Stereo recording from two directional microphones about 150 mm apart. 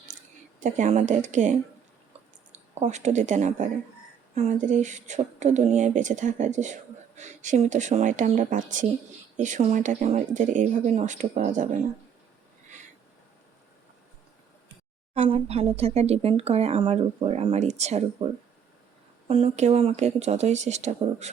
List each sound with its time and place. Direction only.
0.6 s speech: 55° right (ahead or behind)
15.1 s speech: 45° right (ahead or behind)
19.3 s speech: 40° right (ahead or behind)